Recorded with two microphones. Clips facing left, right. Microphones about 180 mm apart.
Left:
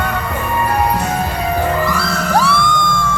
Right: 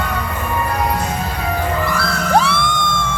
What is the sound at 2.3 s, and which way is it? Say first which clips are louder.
Music: even; 25° right (ahead or behind).